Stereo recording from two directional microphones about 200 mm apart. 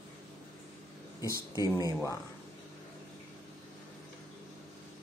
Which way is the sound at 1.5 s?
20° right (ahead or behind).